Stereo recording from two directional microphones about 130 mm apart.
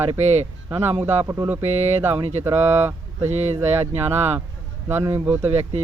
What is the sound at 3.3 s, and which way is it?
Speech, 60° right (ahead or behind).